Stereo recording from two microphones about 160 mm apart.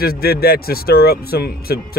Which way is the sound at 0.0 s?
75° left (ahead or behind).